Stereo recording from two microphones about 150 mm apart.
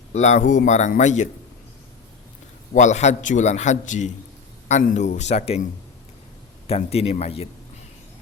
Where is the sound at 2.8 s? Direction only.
50° left (ahead or behind).